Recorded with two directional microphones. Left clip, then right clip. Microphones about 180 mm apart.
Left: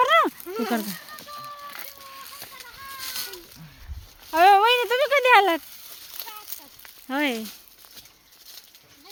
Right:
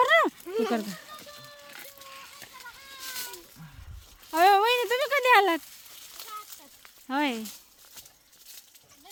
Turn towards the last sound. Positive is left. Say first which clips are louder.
# left 3 dB
turn(degrees=-10)  # may be behind; listen again after turning